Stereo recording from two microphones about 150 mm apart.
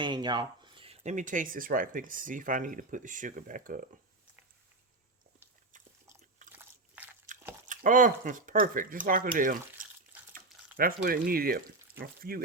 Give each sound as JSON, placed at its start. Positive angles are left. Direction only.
{"t": 0.0, "sound": "a sound", "side_deg": -30}
{"t": 1.0, "sound": "speech", "side_deg": -60}
{"t": 6.5, "sound": "biting", "side_deg": -10}
{"t": 7.7, "sound": "speech", "side_deg": -60}
{"t": 10.8, "sound": "speech", "side_deg": -75}